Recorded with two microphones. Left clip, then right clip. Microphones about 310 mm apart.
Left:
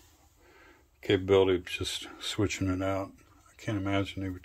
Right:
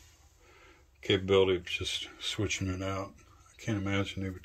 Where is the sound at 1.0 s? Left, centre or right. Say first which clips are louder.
Left 2 dB; centre.